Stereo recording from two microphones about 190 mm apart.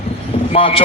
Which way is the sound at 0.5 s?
30° left (ahead or behind).